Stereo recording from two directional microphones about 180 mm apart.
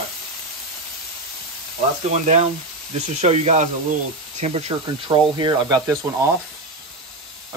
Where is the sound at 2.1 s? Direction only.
40° right (ahead or behind).